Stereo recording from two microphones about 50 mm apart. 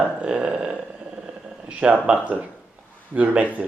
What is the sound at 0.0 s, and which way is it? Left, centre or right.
Speech, right.